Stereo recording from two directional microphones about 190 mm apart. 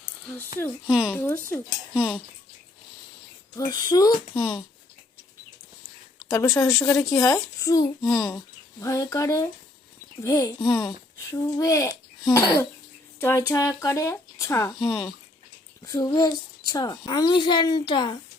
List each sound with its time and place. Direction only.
0.9 s speech: 5° right (ahead or behind)
1.2 s a child's voice: 10° left (ahead or behind)
3.5 s a child's voice: 20° left (ahead or behind)
6.1 s a child's voice: 20° left (ahead or behind)
14.8 s speech: centre (ahead or behind)
15.8 s a child's voice: 20° left (ahead or behind)